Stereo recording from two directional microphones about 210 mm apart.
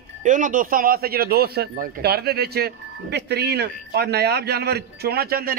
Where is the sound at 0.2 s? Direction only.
35° right (ahead or behind).